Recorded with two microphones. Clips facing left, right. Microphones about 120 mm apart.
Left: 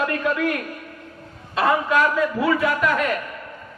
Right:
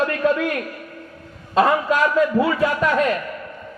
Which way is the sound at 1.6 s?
30° right (ahead or behind).